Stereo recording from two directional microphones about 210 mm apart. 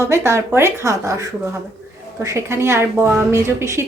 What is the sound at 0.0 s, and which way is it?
A woman's voice, 10° right (ahead or behind).